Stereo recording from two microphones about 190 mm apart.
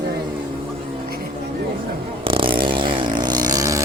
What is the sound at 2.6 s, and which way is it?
Chainsaw, 25° right (ahead or behind).